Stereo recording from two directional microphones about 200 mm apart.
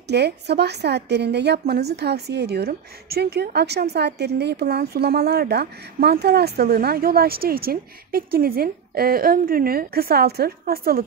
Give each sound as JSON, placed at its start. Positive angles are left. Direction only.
{"t": 0.1, "sound": "a woman's voice", "side_deg": -55}